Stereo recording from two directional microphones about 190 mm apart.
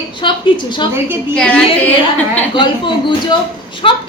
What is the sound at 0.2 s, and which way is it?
Speech, 25° left (ahead or behind).